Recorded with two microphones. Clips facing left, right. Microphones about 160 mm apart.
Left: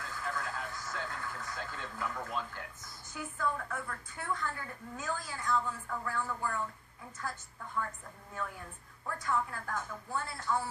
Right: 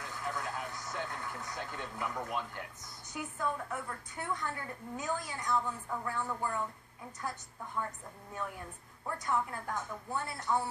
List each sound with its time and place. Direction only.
0.0 s speech: 20° right (ahead or behind)
9.0 s speech: 20° right (ahead or behind)